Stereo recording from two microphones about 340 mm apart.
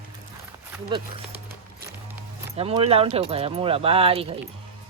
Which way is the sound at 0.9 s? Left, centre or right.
Centre.